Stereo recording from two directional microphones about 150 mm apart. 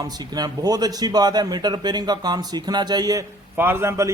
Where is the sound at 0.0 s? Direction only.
25° right (ahead or behind).